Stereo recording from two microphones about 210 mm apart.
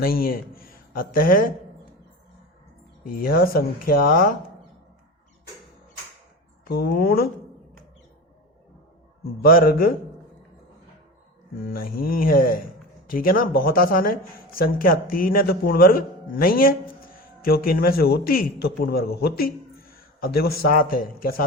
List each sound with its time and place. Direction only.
0.0 s a man's voice: 45° left (ahead or behind)
3.1 s a man's voice: 45° left (ahead or behind)
6.7 s a man's voice: 45° left (ahead or behind)
9.4 s a man's voice: 45° left (ahead or behind)
11.5 s a man's voice: 45° left (ahead or behind)